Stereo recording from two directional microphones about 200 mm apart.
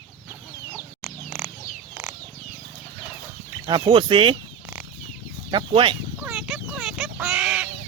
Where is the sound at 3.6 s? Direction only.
20° right (ahead or behind).